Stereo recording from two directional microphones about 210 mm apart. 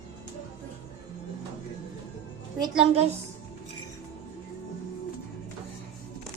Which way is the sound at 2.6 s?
25° right (ahead or behind).